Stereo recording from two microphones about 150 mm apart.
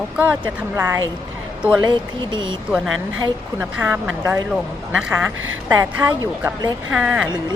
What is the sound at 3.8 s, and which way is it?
A woman's voice, 15° right (ahead or behind).